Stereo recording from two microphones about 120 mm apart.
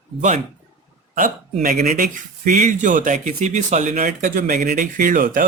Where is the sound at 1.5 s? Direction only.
75° right (ahead or behind).